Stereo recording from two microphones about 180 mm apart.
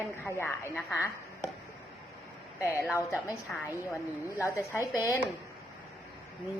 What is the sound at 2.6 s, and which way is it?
Speech, 15° left (ahead or behind).